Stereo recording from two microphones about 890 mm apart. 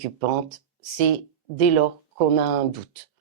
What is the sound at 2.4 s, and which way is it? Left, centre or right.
Speech, right.